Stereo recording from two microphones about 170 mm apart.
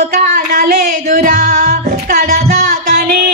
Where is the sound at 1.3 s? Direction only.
65° right (ahead or behind).